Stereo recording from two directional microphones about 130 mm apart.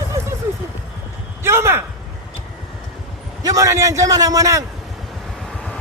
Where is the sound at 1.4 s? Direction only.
20° right (ahead or behind).